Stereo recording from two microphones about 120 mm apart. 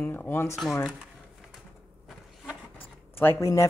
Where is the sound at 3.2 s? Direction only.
25° left (ahead or behind).